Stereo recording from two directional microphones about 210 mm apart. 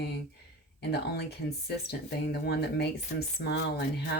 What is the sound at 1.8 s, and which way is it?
Speech, 50° left (ahead or behind).